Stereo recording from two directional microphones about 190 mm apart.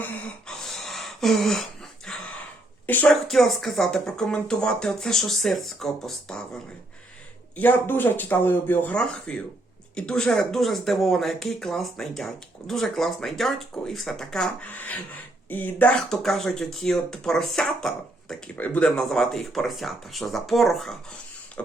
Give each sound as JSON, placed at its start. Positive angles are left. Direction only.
{"t": 0.0, "sound": "a sound", "side_deg": 5}
{"t": 2.8, "sound": "speech", "side_deg": 10}
{"t": 7.5, "sound": "speech", "side_deg": 10}